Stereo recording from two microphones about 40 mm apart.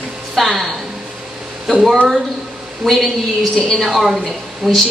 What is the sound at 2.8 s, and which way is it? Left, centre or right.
A woman's voice, centre.